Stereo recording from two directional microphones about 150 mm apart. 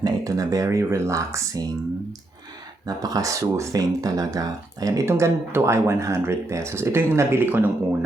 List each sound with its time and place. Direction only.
0.0 s speech: 25° right (ahead or behind)
2.8 s speech: 25° right (ahead or behind)